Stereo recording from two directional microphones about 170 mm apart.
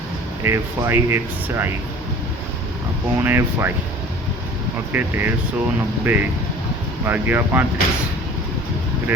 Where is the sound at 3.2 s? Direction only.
15° right (ahead or behind).